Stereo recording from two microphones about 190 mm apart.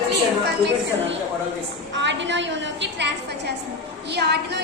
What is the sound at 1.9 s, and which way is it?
A woman's voice, 70° right (ahead or behind).